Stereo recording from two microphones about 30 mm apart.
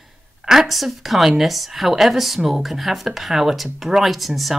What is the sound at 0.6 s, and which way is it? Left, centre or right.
A woman's voice, centre.